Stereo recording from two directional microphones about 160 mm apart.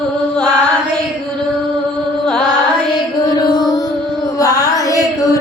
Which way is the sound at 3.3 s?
25° left (ahead or behind).